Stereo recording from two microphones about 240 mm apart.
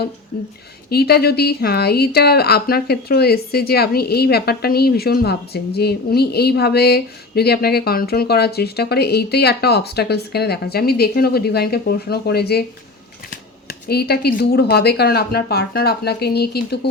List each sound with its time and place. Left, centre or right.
0.9 s a woman's voice: left
13.7 s a woman's voice: left